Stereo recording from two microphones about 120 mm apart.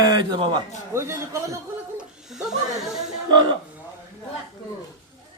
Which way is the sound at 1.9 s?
5° right (ahead or behind).